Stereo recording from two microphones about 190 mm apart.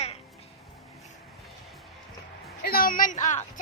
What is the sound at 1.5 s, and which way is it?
Music, centre (ahead or behind).